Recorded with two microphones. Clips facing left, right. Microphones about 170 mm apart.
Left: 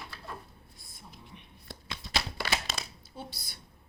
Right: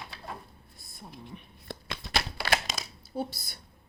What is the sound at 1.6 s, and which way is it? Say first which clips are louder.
Shuffling cards: right 4 dB; 60° right (ahead or behind).